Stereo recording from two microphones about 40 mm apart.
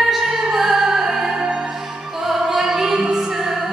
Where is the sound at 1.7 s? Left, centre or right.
Centre.